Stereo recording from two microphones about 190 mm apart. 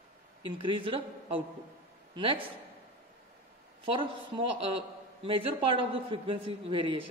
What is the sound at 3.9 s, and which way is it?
A woman's voice, 30° right (ahead or behind).